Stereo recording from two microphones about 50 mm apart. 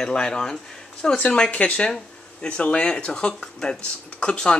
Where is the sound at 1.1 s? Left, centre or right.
Left.